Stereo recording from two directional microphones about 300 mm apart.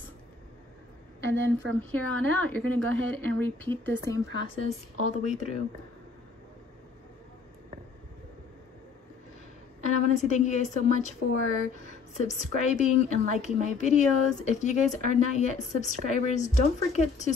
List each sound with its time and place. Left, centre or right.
1.2 s a woman's voice: right
1.8 s a woman's voice: centre; by 5.6 s left
9.8 s a woman's voice: left